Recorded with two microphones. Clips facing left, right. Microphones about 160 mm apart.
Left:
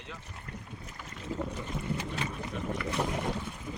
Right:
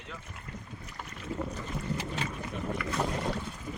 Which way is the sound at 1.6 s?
20° left (ahead or behind).